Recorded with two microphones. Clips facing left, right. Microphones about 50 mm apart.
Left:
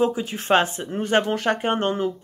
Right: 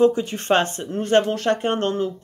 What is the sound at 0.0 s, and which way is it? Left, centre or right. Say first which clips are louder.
Speech: right 5 dB; centre.